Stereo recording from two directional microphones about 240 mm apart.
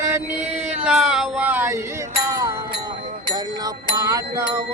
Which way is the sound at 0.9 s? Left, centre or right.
Centre.